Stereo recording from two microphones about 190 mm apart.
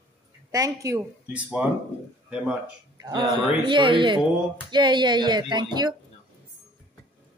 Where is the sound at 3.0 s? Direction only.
25° right (ahead or behind).